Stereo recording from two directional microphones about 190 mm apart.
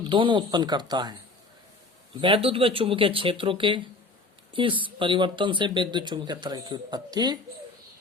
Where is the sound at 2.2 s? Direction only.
25° right (ahead or behind).